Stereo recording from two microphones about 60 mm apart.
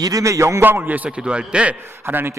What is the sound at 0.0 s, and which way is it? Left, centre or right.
Speech, right.